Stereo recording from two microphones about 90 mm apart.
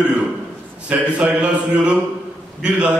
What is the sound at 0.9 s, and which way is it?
A man's voice, 15° right (ahead or behind).